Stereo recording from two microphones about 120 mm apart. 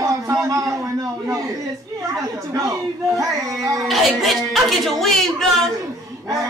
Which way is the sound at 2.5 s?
30° right (ahead or behind).